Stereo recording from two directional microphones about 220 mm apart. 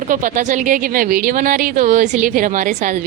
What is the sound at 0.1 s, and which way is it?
Speech, 35° right (ahead or behind).